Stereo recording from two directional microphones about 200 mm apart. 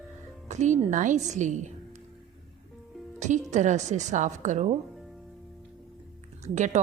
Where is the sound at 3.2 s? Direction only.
35° right (ahead or behind).